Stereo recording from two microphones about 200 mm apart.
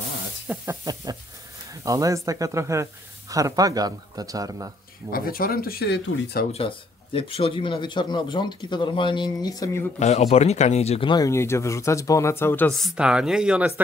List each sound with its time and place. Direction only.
0.5 s speech: 15° right (ahead or behind)
5.1 s speech: 45° left (ahead or behind)
6.5 s speech: 30° left (ahead or behind)
9.9 s speech: 30° left (ahead or behind); by 13.8 s 10° right (ahead or behind)